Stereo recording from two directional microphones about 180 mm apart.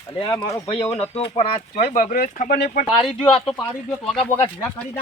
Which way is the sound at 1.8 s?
55° left (ahead or behind).